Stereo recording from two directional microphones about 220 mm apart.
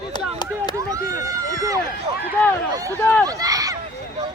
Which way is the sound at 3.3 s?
15° right (ahead or behind).